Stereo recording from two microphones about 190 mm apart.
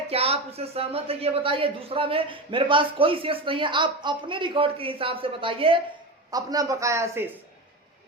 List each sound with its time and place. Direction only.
0.1 s a woman's voice: 30° right (ahead or behind); by 7.3 s 15° right (ahead or behind)